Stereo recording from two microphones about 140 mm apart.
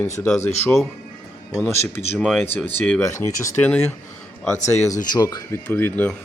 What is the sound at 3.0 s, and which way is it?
Cutlery, 20° left (ahead or behind).